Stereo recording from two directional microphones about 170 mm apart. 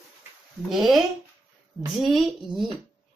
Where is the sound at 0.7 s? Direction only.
Centre (ahead or behind).